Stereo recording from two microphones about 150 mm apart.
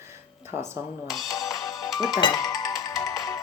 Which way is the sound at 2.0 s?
Centre (ahead or behind).